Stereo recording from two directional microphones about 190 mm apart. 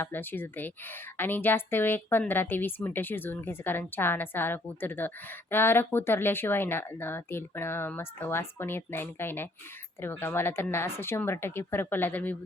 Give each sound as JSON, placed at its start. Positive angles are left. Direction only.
{"t": 0.0, "sound": "a woman's voice", "side_deg": 10}